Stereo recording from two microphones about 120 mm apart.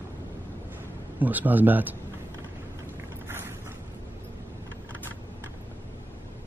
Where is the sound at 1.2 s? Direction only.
15° right (ahead or behind).